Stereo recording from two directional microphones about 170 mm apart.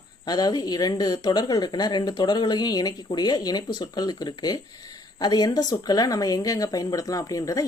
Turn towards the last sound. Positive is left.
turn(degrees=20)  # may be behind; listen again after turning